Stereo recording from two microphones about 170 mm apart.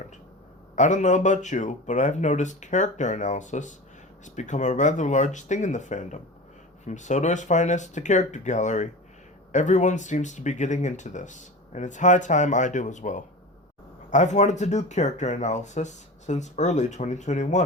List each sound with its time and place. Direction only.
0.8 s speech: 45° left (ahead or behind)